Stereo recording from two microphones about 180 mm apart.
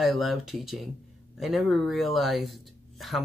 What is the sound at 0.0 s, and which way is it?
Speech, centre (ahead or behind).